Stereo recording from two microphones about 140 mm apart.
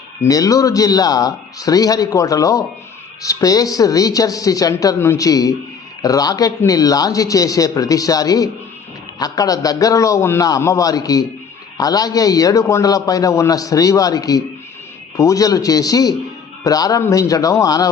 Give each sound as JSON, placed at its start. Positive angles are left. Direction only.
{"t": 0.2, "sound": "a man's voice", "side_deg": 25}